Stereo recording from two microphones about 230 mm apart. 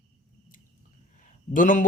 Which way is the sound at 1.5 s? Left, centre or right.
Left.